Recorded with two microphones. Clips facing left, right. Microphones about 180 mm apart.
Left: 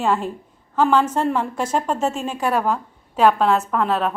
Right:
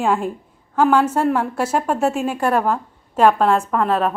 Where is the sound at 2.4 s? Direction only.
10° left (ahead or behind).